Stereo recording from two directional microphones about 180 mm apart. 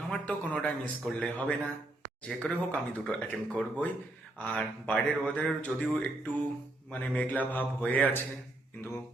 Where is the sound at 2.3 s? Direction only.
5° left (ahead or behind).